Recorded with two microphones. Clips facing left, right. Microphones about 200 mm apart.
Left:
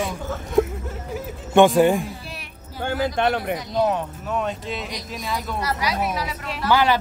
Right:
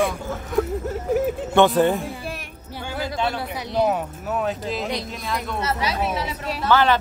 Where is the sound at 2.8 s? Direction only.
60° left (ahead or behind).